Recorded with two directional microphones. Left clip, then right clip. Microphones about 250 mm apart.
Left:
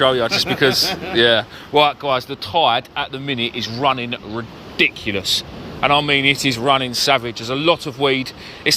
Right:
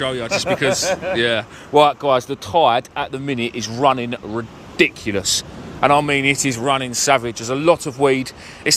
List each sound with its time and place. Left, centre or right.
0.0 s speech: centre
1.7 s speech: right